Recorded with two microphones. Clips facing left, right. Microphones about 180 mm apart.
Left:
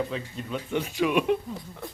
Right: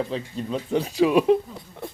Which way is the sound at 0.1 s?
35° right (ahead or behind).